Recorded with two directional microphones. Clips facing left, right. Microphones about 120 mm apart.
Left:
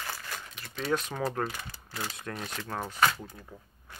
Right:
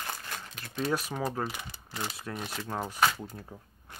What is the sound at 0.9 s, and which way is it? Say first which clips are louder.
Speech: left 4 dB; 10° right (ahead or behind).